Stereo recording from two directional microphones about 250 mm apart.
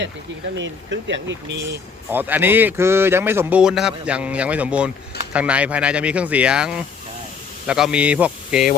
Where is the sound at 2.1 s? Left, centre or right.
Centre.